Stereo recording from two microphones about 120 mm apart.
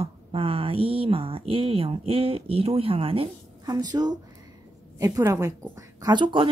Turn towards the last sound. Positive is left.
turn(degrees=-40)  # may be behind; listen again after turning